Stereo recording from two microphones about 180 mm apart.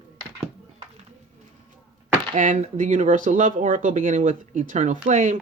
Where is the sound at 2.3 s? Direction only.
45° right (ahead or behind).